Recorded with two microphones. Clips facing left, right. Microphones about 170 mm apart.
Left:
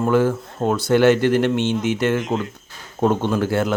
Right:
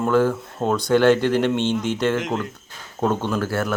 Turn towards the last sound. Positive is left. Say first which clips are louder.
# left 3 dB
turn(degrees=20)  # may be behind; listen again after turning